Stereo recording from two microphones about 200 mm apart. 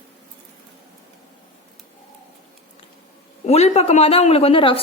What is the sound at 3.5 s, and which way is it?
A woman's voice, 35° left (ahead or behind).